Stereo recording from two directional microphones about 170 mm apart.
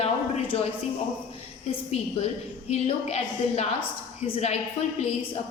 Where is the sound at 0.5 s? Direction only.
35° left (ahead or behind).